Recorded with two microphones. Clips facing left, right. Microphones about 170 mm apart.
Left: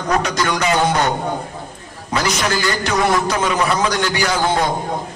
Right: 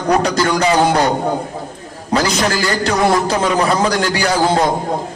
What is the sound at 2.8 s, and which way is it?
A man's voice, 35° right (ahead or behind).